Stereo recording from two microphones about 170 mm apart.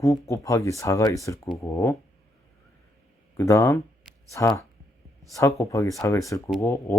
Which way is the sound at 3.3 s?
15° left (ahead or behind).